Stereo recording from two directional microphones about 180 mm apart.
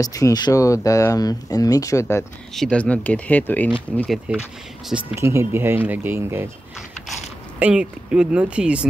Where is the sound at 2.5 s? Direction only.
5° left (ahead or behind).